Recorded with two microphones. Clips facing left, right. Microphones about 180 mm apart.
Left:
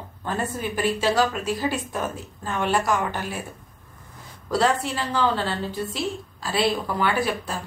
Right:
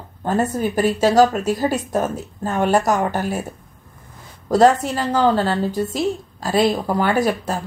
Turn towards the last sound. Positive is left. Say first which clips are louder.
# right 6 dB
turn(degrees=-45)  # may be behind; listen again after turning